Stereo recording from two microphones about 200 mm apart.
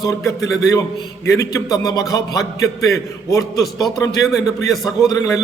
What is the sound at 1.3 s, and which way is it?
A man's voice, 15° left (ahead or behind).